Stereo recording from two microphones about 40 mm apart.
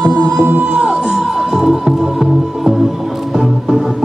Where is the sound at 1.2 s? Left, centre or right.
Centre.